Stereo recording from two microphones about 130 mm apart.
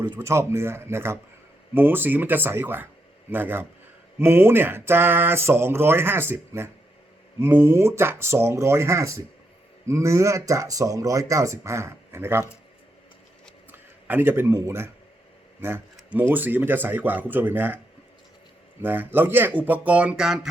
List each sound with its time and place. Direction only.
0.2 s speech: 20° right (ahead or behind)
13.7 s speech: 15° right (ahead or behind)
18.8 s speech: 15° right (ahead or behind)